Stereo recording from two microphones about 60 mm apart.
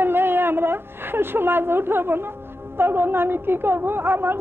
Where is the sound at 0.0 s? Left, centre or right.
Right.